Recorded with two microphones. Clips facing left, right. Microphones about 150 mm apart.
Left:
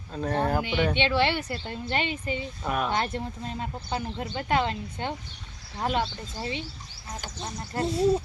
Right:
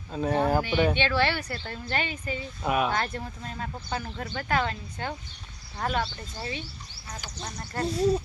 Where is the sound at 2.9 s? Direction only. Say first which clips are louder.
Left 2 dB; 25° left (ahead or behind).